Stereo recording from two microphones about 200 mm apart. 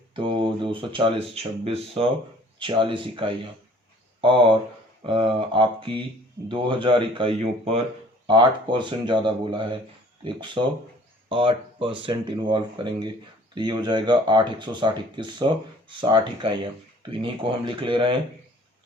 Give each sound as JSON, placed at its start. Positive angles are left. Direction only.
{"t": 0.1, "sound": "speech", "side_deg": -25}